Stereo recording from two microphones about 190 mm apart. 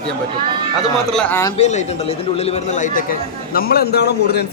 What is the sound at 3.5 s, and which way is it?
Speech, 55° left (ahead or behind).